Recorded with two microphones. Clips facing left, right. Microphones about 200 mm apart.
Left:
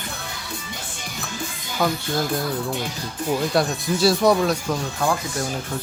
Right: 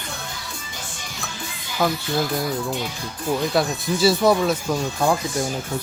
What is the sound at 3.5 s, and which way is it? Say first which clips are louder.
Speech: even; centre (ahead or behind).